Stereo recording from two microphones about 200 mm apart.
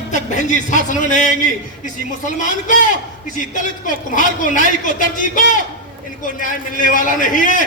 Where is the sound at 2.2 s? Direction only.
40° left (ahead or behind).